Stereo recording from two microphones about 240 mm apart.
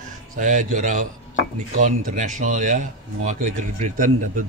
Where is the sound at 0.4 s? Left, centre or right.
Right.